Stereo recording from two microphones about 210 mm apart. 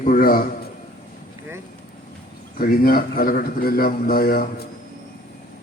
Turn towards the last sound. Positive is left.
turn(degrees=45)  # may be behind; listen again after turning